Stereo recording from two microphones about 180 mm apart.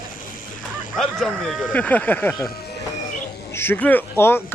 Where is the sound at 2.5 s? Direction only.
60° left (ahead or behind).